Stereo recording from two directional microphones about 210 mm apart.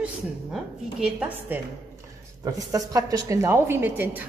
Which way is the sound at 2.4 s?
15° right (ahead or behind).